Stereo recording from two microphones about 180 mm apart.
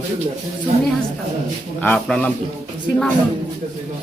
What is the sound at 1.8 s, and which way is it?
Speech, 5° left (ahead or behind).